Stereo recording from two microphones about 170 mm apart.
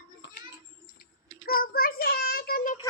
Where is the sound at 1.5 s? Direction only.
60° left (ahead or behind).